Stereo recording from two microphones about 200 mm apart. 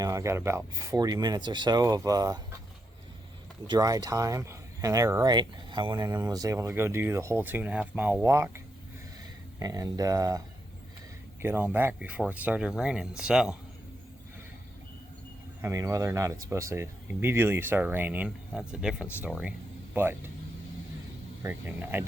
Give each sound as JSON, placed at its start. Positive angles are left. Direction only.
{"t": 0.0, "sound": "speech", "side_deg": -15}
{"t": 3.7, "sound": "speech", "side_deg": -20}
{"t": 11.4, "sound": "speech", "side_deg": -10}
{"t": 15.6, "sound": "speech", "side_deg": -15}
{"t": 21.4, "sound": "speech", "side_deg": -10}